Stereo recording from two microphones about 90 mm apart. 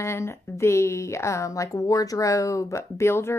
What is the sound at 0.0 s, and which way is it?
A woman's voice, 30° left (ahead or behind).